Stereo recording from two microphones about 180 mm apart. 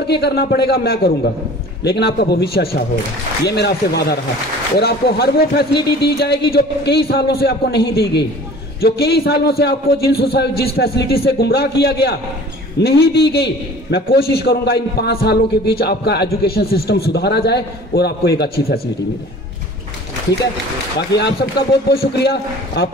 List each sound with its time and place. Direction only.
0.0 s a man's voice: 65° left (ahead or behind)
21.9 s a man's voice: 60° left (ahead or behind)